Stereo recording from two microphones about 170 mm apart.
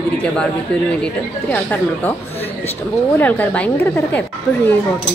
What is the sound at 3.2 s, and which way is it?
Speech, 10° left (ahead or behind).